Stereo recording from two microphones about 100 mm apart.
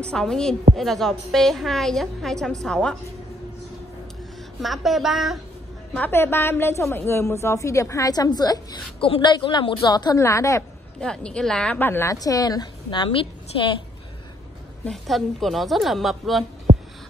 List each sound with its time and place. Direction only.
0.0 s a woman's voice: 5° left (ahead or behind)
4.6 s a woman's voice: centre (ahead or behind)
5.9 s a woman's voice: 20° left (ahead or behind); by 10.1 s 45° left (ahead or behind)
10.1 s a woman's voice: 30° left (ahead or behind)
11.0 s a woman's voice: 10° left (ahead or behind)
12.2 s a woman's voice: 40° left (ahead or behind)
12.9 s a woman's voice: 55° left (ahead or behind)
14.9 s a woman's voice: centre (ahead or behind)